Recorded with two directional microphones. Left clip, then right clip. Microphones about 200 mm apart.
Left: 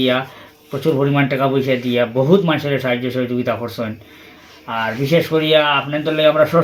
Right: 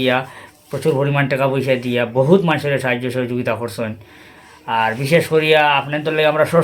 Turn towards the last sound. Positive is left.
turn(degrees=-25)  # may be behind; listen again after turning